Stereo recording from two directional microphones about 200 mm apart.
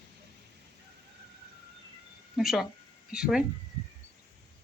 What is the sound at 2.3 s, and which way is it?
Speech, centre (ahead or behind).